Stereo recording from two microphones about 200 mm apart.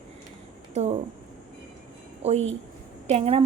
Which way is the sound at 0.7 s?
35° right (ahead or behind).